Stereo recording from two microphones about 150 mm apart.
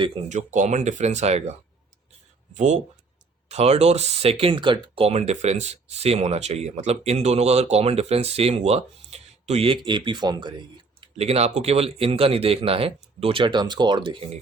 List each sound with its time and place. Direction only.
0.3 s speech: 50° right (ahead or behind)
2.6 s speech: 50° right (ahead or behind); by 10.5 s 30° right (ahead or behind)
11.0 s speech: 45° right (ahead or behind)